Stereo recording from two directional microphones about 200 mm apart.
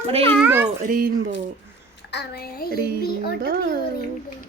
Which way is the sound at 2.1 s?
55° left (ahead or behind).